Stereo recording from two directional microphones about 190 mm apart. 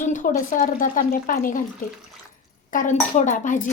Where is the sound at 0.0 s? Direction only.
40° left (ahead or behind).